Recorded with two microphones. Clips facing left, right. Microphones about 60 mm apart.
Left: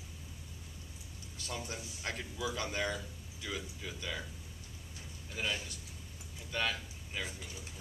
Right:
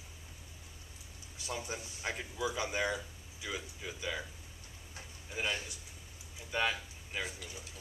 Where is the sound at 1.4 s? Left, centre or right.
Centre.